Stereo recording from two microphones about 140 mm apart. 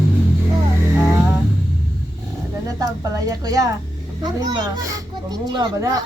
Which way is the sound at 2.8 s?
25° right (ahead or behind).